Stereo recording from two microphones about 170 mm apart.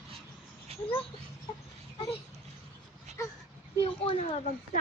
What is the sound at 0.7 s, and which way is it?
Dog, 35° right (ahead or behind).